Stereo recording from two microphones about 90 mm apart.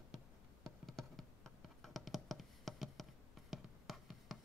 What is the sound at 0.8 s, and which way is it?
Music, centre (ahead or behind).